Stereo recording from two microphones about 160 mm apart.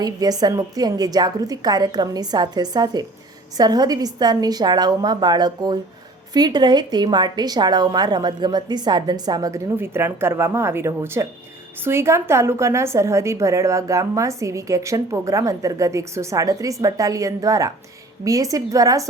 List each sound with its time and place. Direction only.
0.0 s a woman's voice: 25° right (ahead or behind)